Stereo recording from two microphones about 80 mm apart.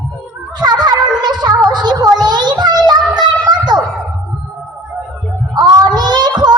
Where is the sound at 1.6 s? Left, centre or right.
Right.